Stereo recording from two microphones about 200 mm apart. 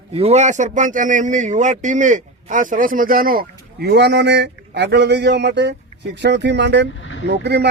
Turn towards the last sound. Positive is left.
turn(degrees=-60)  # may be behind; listen again after turning